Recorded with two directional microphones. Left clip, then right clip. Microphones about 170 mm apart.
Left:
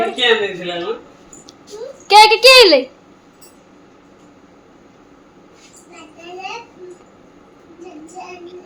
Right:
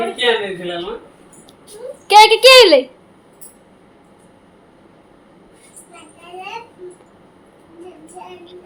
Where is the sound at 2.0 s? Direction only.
Centre (ahead or behind).